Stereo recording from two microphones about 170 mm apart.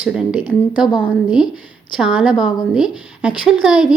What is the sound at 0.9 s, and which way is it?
Speech, 30° left (ahead or behind).